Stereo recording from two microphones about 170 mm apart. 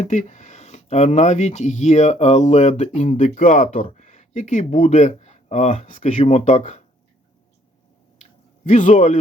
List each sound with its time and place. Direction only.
0.0 s speech: 45° left (ahead or behind)
8.2 s squish: 45° left (ahead or behind)